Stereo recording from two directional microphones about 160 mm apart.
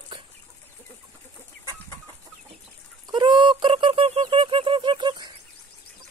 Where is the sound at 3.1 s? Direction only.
30° right (ahead or behind).